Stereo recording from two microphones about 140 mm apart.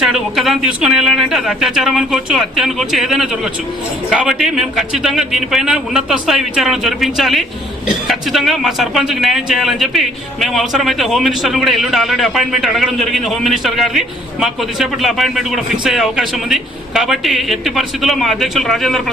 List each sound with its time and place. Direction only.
0.0 s a man's voice: centre (ahead or behind)